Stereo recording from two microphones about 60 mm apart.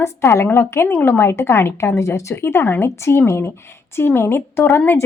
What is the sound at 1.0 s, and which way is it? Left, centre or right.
Speech, left.